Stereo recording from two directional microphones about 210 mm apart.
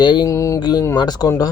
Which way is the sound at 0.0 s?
20° left (ahead or behind).